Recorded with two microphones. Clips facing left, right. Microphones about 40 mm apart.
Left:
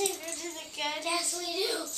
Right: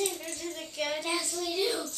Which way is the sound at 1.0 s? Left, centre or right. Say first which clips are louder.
Right 1 dB; centre.